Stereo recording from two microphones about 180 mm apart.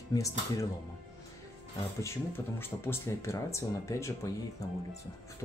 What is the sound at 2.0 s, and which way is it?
Speech, 15° left (ahead or behind).